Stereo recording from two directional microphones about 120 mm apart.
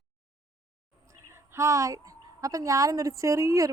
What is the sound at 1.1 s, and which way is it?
A woman's voice, 25° right (ahead or behind).